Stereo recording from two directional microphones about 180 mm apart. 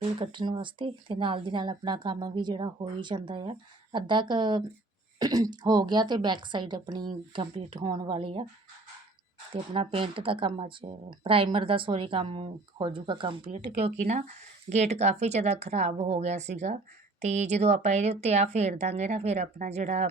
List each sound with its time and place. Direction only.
0.2 s speech: 25° right (ahead or behind)
9.5 s speech: 30° right (ahead or behind)
14.1 s speech: 40° right (ahead or behind)